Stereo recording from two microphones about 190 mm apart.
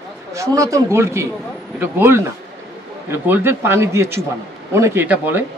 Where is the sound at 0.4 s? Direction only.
15° right (ahead or behind).